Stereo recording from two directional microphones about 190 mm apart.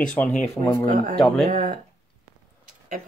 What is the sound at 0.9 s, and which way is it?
Speech, 45° right (ahead or behind).